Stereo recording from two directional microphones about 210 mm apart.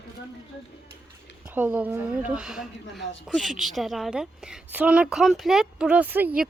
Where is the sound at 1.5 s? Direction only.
5° right (ahead or behind).